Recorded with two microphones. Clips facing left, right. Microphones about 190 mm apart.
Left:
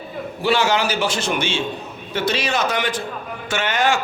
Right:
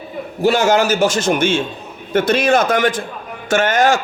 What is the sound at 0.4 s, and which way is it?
A man's voice, 45° right (ahead or behind).